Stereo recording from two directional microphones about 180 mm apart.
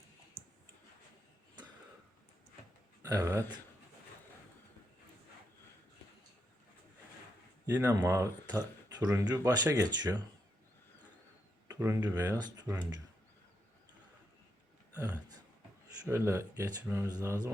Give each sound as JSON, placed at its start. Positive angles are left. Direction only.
{"t": 3.0, "sound": "speech", "side_deg": -15}
{"t": 7.7, "sound": "speech", "side_deg": -15}
{"t": 11.7, "sound": "speech", "side_deg": -20}
{"t": 16.0, "sound": "speech", "side_deg": -15}